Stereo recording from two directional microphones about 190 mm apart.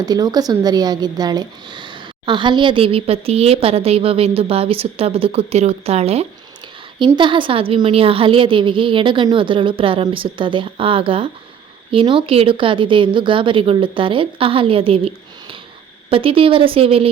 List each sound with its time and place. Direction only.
0.0 s a woman's voice: 20° right (ahead or behind)